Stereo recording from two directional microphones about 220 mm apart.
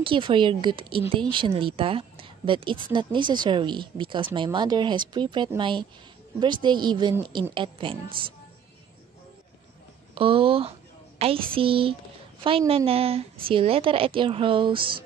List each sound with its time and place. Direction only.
0.0 s speech: 25° right (ahead or behind)
10.1 s speech: 25° right (ahead or behind)